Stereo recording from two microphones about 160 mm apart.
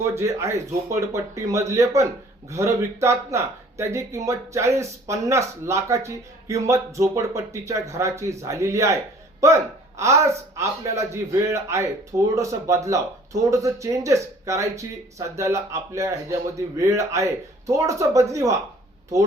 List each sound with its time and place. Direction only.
0.0 s speech: 20° right (ahead or behind)